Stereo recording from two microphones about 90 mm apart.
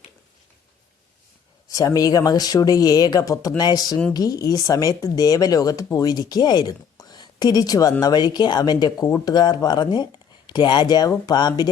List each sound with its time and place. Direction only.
1.6 s speech: 40° left (ahead or behind)